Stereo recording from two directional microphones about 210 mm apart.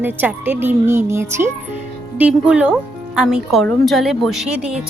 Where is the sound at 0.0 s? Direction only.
10° right (ahead or behind).